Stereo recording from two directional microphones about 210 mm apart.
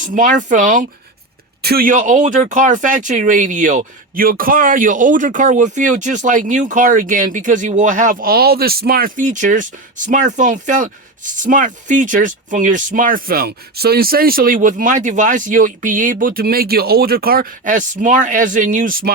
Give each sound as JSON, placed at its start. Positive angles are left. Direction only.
{"t": 0.0, "sound": "speech", "side_deg": -40}